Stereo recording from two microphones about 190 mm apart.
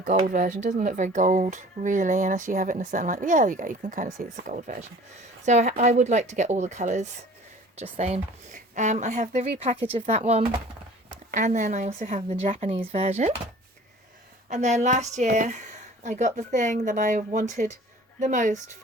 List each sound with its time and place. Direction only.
0.3 s a woman's voice: 45° right (ahead or behind)
14.5 s a woman's voice: 40° right (ahead or behind)